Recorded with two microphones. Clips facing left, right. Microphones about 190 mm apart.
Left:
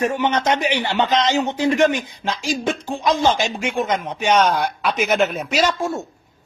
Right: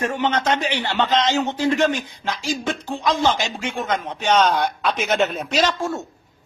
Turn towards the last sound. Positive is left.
turn(degrees=10)  # may be behind; listen again after turning